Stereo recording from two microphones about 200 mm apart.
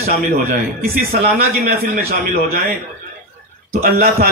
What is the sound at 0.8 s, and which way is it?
Speech, 50° right (ahead or behind).